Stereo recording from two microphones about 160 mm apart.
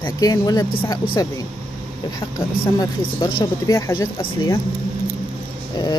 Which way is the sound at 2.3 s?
25° left (ahead or behind).